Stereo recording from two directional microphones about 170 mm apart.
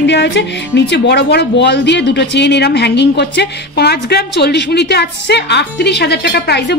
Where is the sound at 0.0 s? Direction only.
90° left.